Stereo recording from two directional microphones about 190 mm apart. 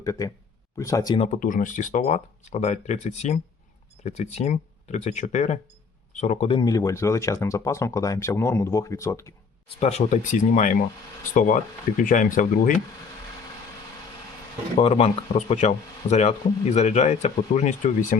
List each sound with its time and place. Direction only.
0.0 s speech: 15° left (ahead or behind)
1.2 s speech: 40° left (ahead or behind); by 9.3 s 15° left (ahead or behind)
9.6 s speech: 35° left (ahead or behind)
14.8 s speech: 30° left (ahead or behind)